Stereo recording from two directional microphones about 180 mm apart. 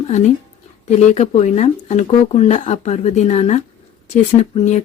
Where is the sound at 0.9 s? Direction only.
40° left (ahead or behind).